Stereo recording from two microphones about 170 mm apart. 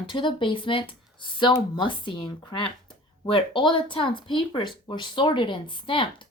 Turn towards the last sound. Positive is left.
turn(degrees=30)  # may be behind; listen again after turning